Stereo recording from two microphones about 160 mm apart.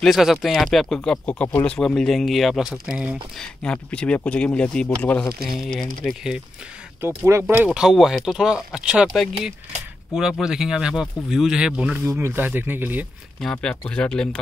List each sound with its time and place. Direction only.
0.0 s speech: centre (ahead or behind)
3.6 s speech: 5° left (ahead or behind)
5.6 s speech: 5° left (ahead or behind)
7.0 s speech: 15° right (ahead or behind)
13.4 s speech: 5° left (ahead or behind)